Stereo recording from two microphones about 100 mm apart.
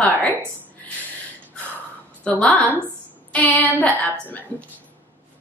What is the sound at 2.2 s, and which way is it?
A woman's voice, 10° left (ahead or behind).